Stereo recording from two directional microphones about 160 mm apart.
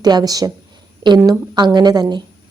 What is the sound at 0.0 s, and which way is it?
A woman's voice, 25° right (ahead or behind).